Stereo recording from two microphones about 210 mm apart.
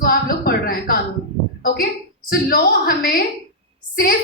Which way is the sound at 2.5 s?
45° left (ahead or behind).